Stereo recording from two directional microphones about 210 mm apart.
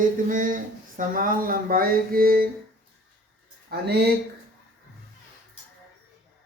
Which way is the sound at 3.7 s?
50° right (ahead or behind).